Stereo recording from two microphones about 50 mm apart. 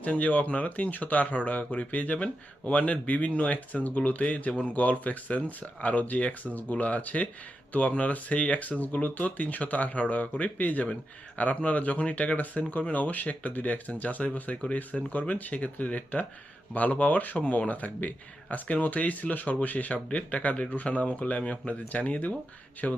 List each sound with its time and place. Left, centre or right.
0.0 s speech: left